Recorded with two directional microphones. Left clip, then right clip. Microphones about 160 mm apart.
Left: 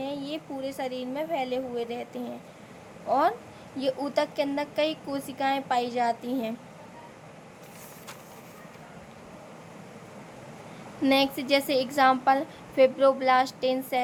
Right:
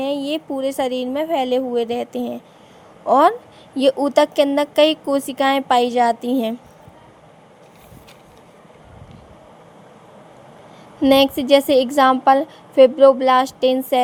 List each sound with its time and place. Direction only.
0.0 s speech: 55° right (ahead or behind)
11.1 s a woman's voice: 50° right (ahead or behind)